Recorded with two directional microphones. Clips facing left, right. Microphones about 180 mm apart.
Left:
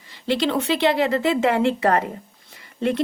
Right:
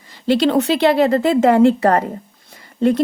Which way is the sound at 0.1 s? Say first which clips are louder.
Right 6 dB; 40° right (ahead or behind).